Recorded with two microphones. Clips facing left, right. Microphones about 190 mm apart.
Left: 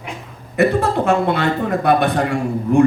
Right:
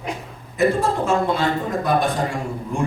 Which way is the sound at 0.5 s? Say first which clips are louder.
Left 3 dB; 65° left (ahead or behind).